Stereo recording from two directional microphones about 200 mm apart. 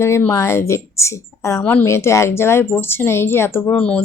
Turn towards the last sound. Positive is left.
turn(degrees=5)  # may be behind; listen again after turning